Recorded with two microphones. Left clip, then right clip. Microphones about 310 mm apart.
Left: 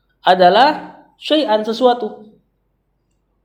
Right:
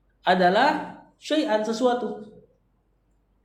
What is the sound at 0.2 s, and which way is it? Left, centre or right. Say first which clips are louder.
Speech: left 9 dB; left.